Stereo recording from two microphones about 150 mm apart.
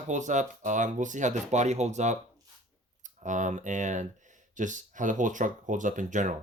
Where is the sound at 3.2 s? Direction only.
55° right (ahead or behind).